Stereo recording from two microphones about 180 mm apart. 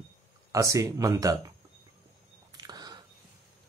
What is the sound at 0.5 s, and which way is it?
Speech, 15° right (ahead or behind).